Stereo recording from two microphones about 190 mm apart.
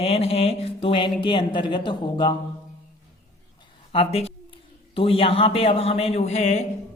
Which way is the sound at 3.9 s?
30° left (ahead or behind).